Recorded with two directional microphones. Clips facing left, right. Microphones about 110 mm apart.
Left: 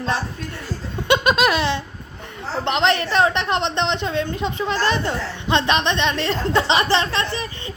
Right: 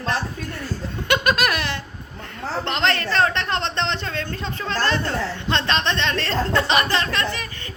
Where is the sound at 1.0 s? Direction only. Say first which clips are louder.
Left 3 dB; 25° left (ahead or behind).